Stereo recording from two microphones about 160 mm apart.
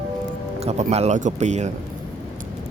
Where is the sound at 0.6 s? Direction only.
40° right (ahead or behind).